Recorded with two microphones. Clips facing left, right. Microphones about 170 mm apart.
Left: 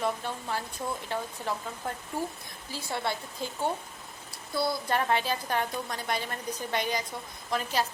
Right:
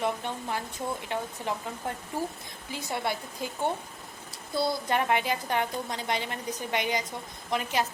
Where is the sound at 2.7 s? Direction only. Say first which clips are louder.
Right 1 dB; 15° right (ahead or behind).